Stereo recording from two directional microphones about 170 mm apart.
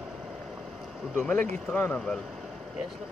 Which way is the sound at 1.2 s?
10° left (ahead or behind).